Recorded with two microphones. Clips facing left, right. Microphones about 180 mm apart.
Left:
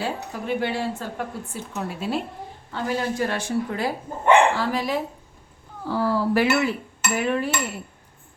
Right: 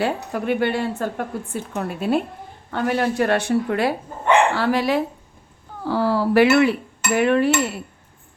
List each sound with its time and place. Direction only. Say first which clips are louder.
0.0 s speech: right 6 dB; 65° right (ahead or behind)
2.6 s dishes: right 5 dB; 65° right (ahead or behind)